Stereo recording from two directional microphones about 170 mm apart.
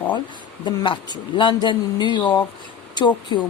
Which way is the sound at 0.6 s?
25° left (ahead or behind).